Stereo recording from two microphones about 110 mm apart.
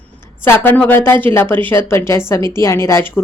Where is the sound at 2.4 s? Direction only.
40° right (ahead or behind).